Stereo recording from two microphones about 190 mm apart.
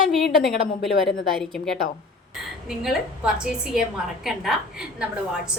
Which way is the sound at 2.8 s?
5° right (ahead or behind).